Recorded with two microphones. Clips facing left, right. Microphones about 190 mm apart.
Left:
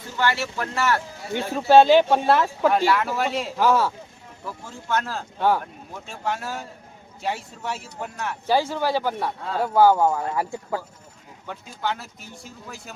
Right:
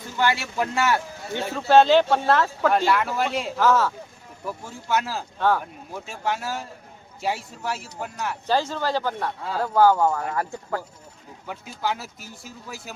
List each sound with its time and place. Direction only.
0.2 s speech: 15° right (ahead or behind)
1.5 s speech: 15° left (ahead or behind)
2.7 s speech: centre (ahead or behind)
3.6 s speech: 15° left (ahead or behind)
4.4 s speech: 10° right (ahead or behind)
5.4 s speech: 10° left (ahead or behind)
6.1 s speech: 5° right (ahead or behind)
8.4 s speech: 15° left (ahead or behind)
11.4 s speech: 5° right (ahead or behind)